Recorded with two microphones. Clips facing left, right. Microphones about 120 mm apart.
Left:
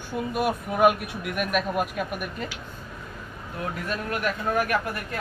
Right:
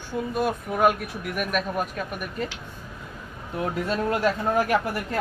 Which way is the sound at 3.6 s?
25° right (ahead or behind).